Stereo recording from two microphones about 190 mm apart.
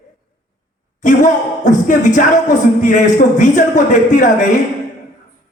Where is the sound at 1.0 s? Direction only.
40° left (ahead or behind).